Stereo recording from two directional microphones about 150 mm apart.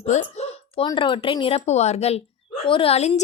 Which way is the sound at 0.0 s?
45° left (ahead or behind).